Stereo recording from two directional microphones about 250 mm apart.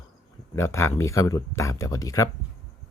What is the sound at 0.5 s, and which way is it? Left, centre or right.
Speech, centre.